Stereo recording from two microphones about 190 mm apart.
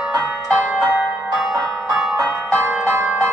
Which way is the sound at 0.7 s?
5° right (ahead or behind).